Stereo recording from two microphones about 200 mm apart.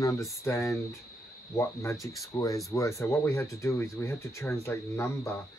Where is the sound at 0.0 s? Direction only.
15° left (ahead or behind).